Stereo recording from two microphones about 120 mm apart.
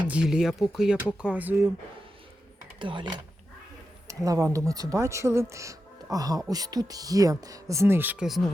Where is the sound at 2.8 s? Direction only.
40° right (ahead or behind).